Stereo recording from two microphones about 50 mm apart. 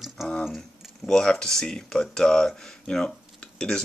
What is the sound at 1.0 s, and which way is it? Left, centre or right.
Speech, centre.